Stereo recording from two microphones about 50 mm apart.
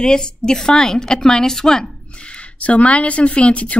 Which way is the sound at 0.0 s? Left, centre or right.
Centre.